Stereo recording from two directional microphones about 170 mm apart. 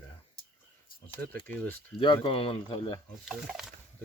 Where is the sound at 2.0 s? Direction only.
30° left (ahead or behind).